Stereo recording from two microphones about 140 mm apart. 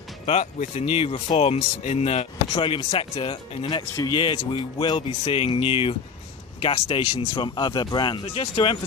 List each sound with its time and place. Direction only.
0.3 s speech: 50° left (ahead or behind)
2.5 s speech: 35° left (ahead or behind)